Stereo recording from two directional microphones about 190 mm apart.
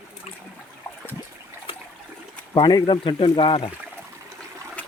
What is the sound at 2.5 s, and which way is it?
Speech, 20° left (ahead or behind).